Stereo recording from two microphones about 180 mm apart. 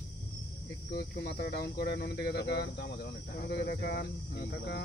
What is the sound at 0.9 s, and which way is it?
Speech, 65° left (ahead or behind).